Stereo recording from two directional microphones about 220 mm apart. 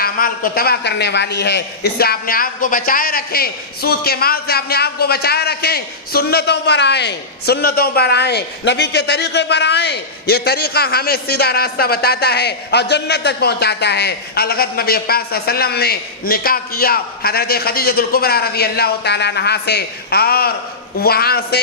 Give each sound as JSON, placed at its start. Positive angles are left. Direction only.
{"t": 0.0, "sound": "a man's voice", "side_deg": 40}